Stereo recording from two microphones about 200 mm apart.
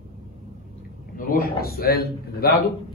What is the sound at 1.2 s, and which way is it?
A man's voice, 45° left (ahead or behind).